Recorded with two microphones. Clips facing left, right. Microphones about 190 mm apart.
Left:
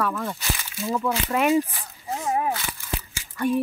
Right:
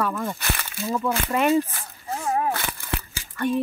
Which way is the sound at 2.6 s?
55° right (ahead or behind).